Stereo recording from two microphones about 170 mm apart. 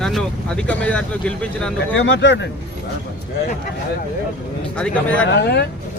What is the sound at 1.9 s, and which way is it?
Speech, 90° left.